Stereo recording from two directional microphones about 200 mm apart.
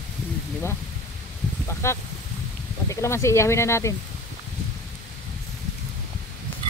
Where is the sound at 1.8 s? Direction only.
15° left (ahead or behind).